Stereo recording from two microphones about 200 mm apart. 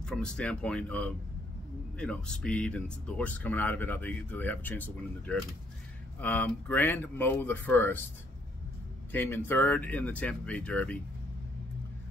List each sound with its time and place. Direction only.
0.0 s speech: 5° left (ahead or behind)
9.1 s speech: 10° left (ahead or behind)